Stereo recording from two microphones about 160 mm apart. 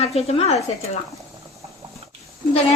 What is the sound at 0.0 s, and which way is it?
Speech, 40° left (ahead or behind).